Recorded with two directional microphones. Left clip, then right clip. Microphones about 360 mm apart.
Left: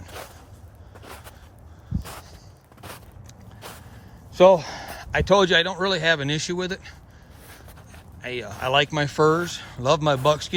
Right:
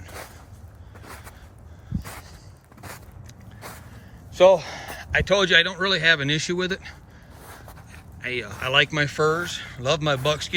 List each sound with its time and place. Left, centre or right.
1.0 s a sound: centre
4.4 s speech: left
8.2 s speech: centre